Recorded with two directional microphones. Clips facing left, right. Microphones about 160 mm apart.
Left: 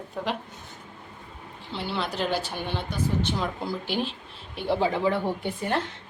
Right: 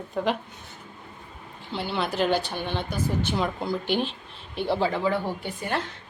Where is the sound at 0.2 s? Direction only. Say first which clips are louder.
Right 5 dB; centre (ahead or behind).